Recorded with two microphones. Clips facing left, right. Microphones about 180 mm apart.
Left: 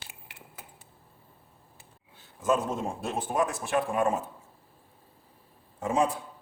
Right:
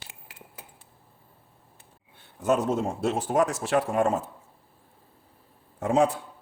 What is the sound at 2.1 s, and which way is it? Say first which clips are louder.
A man's voice: right 2 dB; 65° right (ahead or behind).